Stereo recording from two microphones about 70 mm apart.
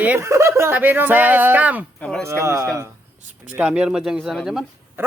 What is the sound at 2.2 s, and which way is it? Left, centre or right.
Speech, right.